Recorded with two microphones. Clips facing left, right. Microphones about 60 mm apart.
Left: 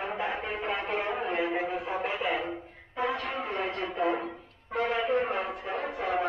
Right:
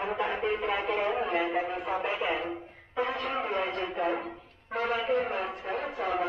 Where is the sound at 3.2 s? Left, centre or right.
Right.